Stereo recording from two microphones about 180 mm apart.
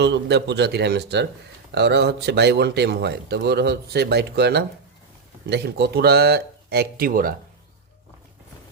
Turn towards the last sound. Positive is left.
turn(degrees=-50)  # may be behind; listen again after turning